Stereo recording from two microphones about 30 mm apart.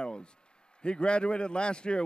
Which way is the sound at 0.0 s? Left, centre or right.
Left.